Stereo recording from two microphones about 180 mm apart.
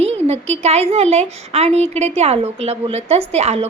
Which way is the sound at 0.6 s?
35° right (ahead or behind).